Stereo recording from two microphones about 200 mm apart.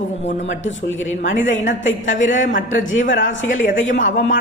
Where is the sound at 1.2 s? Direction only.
40° left (ahead or behind).